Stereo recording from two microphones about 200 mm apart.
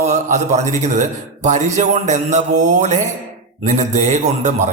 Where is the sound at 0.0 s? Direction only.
35° right (ahead or behind).